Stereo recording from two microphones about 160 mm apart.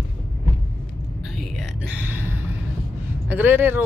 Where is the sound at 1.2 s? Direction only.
Centre (ahead or behind).